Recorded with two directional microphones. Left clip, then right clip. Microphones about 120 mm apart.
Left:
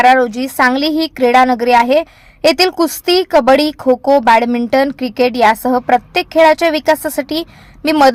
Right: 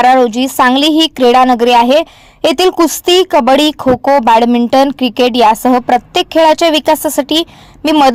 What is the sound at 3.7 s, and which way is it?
Speech, 5° right (ahead or behind).